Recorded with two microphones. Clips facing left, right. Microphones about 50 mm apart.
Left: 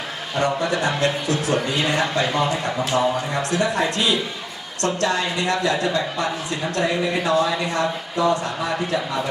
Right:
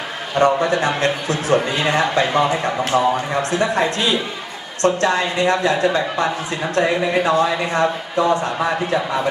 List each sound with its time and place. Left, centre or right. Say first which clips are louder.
0.3 s a man's voice: right 6 dB; right
2.9 s a man's voice: right 3 dB; centre
3.5 s a man's voice: right 2 dB; right